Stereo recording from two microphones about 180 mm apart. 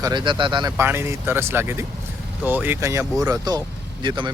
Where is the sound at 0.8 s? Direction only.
15° right (ahead or behind).